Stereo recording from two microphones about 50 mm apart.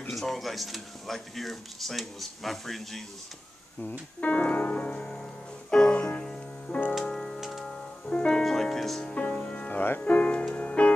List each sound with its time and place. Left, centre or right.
0.2 s speech: centre
4.2 s music: left
5.7 s music: centre
7.3 s music: centre
8.3 s music: centre
9.0 s music: left